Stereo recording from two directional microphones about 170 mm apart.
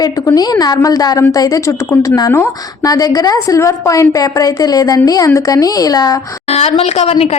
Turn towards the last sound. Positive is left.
turn(degrees=35)  # may be behind; listen again after turning